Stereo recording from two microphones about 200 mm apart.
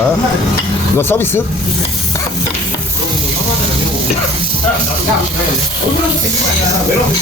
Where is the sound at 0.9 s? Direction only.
10° left (ahead or behind).